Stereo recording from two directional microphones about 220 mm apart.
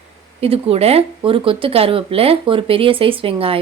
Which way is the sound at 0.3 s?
25° right (ahead or behind).